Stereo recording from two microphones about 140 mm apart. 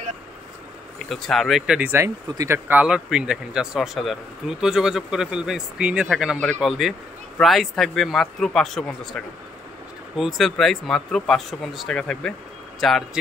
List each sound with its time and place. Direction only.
1.0 s speech: centre (ahead or behind)
1.8 s speech: 15° right (ahead or behind); by 13.2 s centre (ahead or behind)